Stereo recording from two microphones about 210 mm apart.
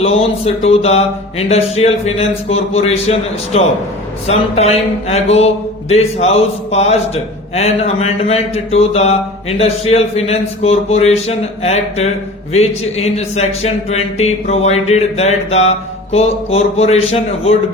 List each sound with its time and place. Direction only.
0.0 s a man's voice: 30° left (ahead or behind)